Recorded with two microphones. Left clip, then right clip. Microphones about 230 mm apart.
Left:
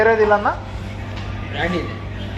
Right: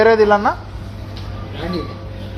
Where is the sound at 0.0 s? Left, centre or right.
Right.